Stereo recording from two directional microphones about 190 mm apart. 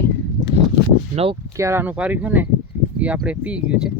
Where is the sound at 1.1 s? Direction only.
30° right (ahead or behind).